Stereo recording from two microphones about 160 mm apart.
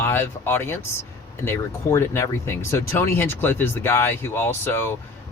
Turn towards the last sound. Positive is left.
turn(degrees=15)  # may be behind; listen again after turning